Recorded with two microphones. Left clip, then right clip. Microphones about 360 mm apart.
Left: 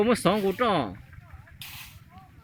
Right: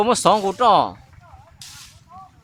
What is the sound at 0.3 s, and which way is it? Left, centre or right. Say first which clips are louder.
Speech: right 6 dB; right.